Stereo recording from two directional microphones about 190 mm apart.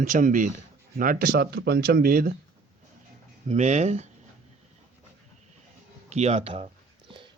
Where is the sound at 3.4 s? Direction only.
35° right (ahead or behind).